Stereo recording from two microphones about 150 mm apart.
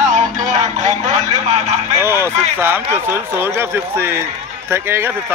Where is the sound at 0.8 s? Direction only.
50° right (ahead or behind).